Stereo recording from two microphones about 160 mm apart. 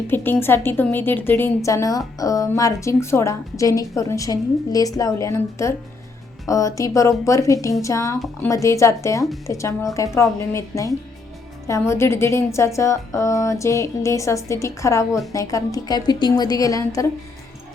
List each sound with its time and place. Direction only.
0.1 s a woman's voice: 15° left (ahead or behind)